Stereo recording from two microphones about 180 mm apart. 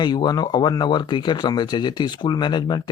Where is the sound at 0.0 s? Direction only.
25° left (ahead or behind).